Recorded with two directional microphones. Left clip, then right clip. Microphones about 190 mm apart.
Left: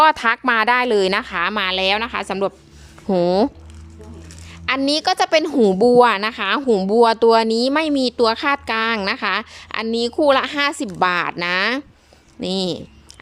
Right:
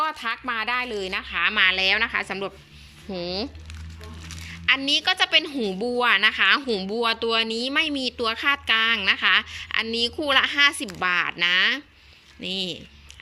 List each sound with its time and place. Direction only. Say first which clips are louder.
0.0 s speech: left 12 dB; 45° left (ahead or behind); by 2.5 s 15° left (ahead or behind)
3.1 s speech: left 13 dB; 40° left (ahead or behind)
4.3 s a sound: right 1 dB; 15° left (ahead or behind)
4.8 s a woman's voice: left 4 dB; 30° left (ahead or behind)